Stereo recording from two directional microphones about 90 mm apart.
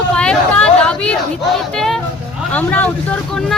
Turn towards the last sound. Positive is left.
turn(degrees=15)  # may be behind; listen again after turning